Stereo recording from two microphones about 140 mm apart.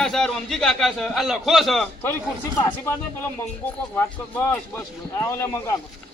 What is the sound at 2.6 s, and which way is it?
Speech, 25° left (ahead or behind).